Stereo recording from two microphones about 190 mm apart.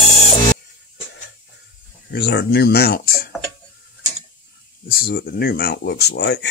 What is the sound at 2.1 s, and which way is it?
Speech, 60° left (ahead or behind).